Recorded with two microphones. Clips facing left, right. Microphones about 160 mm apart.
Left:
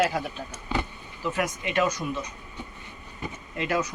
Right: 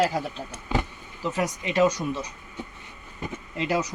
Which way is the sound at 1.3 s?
30° right (ahead or behind).